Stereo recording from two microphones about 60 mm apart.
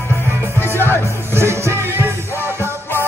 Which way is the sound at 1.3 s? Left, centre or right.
Right.